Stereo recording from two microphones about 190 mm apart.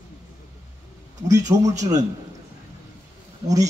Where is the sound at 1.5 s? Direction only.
15° right (ahead or behind).